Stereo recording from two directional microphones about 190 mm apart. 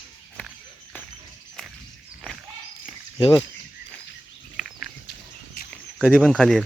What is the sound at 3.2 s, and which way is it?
Speech, 25° left (ahead or behind).